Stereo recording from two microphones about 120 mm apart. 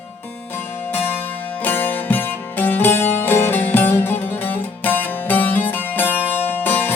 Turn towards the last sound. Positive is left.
turn(degrees=15)  # may be behind; listen again after turning